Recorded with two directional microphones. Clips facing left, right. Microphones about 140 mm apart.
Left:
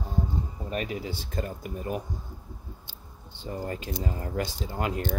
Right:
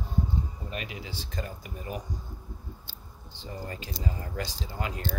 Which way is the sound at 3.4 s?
50° left (ahead or behind).